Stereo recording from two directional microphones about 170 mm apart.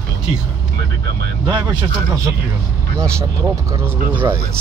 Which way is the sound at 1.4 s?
20° right (ahead or behind).